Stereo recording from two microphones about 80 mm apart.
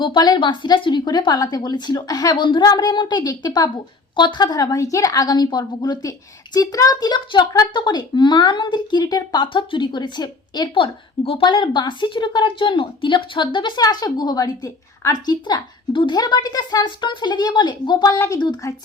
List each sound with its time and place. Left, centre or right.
0.0 s a woman's voice: left
2.6 s a woman's voice: left
11.3 s a woman's voice: left
13.8 s a woman's voice: left
16.1 s a woman's voice: left
18.0 s a woman's voice: left